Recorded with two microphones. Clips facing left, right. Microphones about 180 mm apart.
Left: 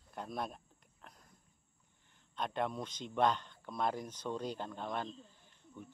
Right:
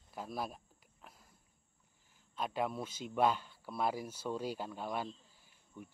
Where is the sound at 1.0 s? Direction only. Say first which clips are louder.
Even; 5° right (ahead or behind).